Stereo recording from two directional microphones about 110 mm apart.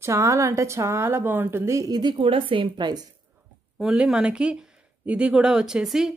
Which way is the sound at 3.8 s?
5° right (ahead or behind).